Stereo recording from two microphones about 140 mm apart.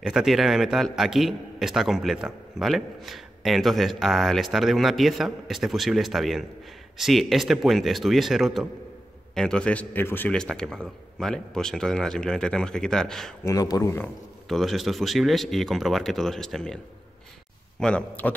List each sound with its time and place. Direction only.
0.0 s a man's voice: 5° right (ahead or behind)
13.4 s a man's voice: 25° left (ahead or behind)
14.5 s a man's voice: centre (ahead or behind)